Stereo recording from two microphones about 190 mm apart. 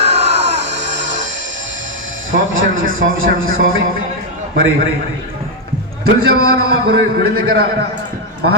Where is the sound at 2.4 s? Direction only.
90° right.